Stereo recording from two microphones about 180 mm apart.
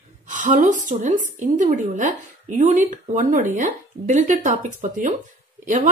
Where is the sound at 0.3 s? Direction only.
45° right (ahead or behind).